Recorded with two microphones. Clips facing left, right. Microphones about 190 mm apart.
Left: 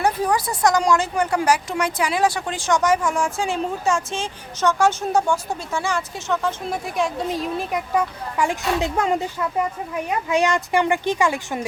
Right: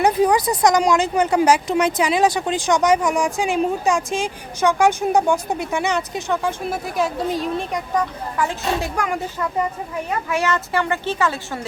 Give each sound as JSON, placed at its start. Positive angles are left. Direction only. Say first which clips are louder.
{"t": 0.0, "sound": "speech", "louder": "right 4 dB", "side_deg": -15}
{"t": 6.8, "sound": "a woman's voice", "louder": "right 2 dB", "side_deg": 0}
{"t": 8.8, "sound": "a woman's voice", "louder": "left 3 dB", "side_deg": 20}